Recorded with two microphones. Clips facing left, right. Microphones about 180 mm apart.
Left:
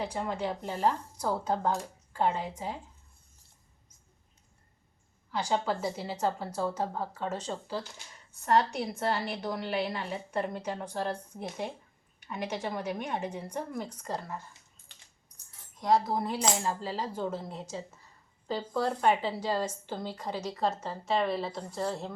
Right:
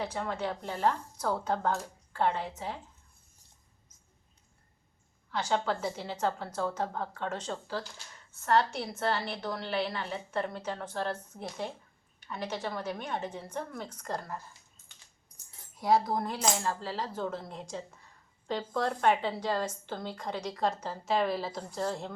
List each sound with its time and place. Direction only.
0.0 s speech: 10° left (ahead or behind)
5.3 s speech: 10° left (ahead or behind)
15.7 s cutlery: 5° right (ahead or behind)